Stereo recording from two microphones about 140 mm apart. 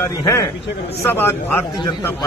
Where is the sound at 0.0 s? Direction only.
20° left (ahead or behind).